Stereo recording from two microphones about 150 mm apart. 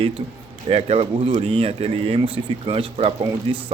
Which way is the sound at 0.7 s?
45° right (ahead or behind).